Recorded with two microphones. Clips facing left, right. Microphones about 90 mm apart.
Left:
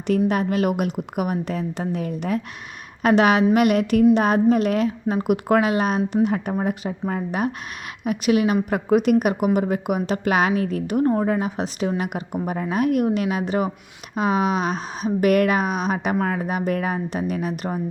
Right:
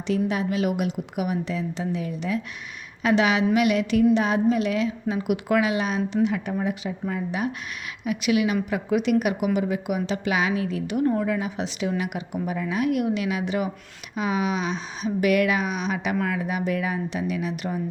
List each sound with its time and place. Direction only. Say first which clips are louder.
0.3 s a woman's voice: left 4 dB; 50° left (ahead or behind)